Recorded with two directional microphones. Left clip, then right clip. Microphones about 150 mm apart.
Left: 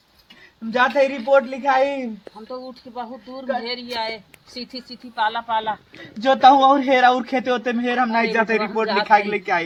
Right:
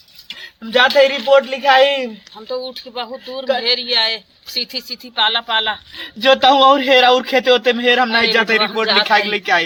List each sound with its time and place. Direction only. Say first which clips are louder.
0.9 s a man's voice: right 7 dB; 25° right (ahead or behind)
1.1 s a man's voice: right 5 dB; centre (ahead or behind)
1.4 s a man's voice: right 7 dB; 15° right (ahead or behind)
3.6 s a man's voice: right 11 dB; 5° left (ahead or behind); by 9.6 s 10° right (ahead or behind)